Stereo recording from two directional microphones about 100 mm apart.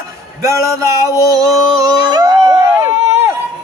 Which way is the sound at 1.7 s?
45° right (ahead or behind).